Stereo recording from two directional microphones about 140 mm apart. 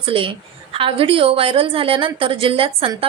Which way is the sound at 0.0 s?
40° right (ahead or behind).